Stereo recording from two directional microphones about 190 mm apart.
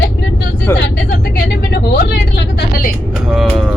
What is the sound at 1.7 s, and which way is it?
Vehicle, 60° left (ahead or behind).